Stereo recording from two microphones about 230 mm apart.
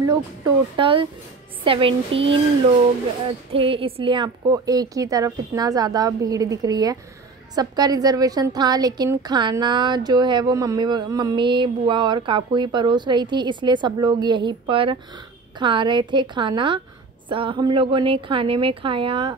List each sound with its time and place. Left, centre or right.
0.0 s a woman's voice: centre
3.5 s a woman's voice: right